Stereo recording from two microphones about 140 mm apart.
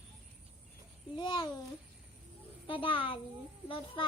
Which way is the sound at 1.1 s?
35° left (ahead or behind).